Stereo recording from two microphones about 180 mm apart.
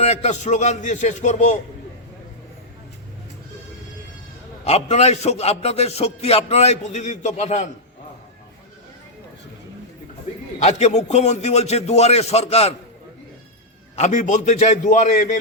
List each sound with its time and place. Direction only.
0.0 s a man's voice: 35° left (ahead or behind)
4.6 s a man's voice: 35° left (ahead or behind)
10.6 s a man's voice: 40° left (ahead or behind)
13.9 s a man's voice: 40° left (ahead or behind)